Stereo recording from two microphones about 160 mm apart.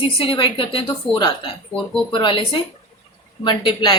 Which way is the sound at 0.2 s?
30° left (ahead or behind).